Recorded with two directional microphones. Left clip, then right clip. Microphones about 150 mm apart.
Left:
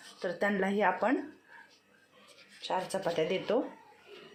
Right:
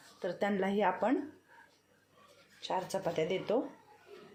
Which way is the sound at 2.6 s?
15° right (ahead or behind).